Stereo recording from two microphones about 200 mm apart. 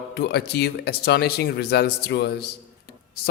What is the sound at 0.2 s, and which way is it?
A man's voice, 55° left (ahead or behind).